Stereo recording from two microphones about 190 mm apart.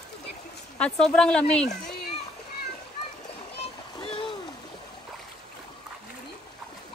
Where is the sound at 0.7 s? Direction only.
5° left (ahead or behind).